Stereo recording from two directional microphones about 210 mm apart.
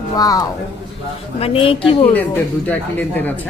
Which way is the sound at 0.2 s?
15° left (ahead or behind).